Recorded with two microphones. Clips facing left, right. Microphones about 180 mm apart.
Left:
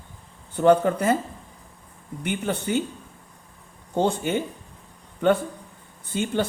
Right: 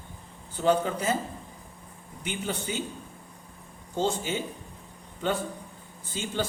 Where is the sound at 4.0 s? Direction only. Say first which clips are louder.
Left 5 dB; 60° left (ahead or behind).